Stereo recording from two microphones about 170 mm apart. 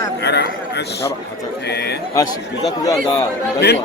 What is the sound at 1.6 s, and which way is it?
Speech, 75° left (ahead or behind).